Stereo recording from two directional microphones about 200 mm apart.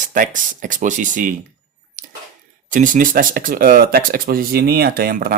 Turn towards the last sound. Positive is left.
turn(degrees=-50)  # may be behind; listen again after turning